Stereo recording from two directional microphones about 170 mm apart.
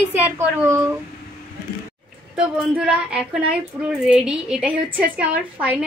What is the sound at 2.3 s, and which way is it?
A woman's voice, 5° right (ahead or behind).